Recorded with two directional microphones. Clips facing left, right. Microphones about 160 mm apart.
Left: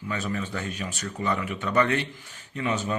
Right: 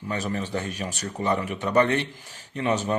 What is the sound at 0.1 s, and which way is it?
Speech, 40° right (ahead or behind).